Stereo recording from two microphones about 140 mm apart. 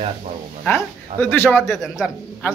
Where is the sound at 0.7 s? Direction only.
15° left (ahead or behind).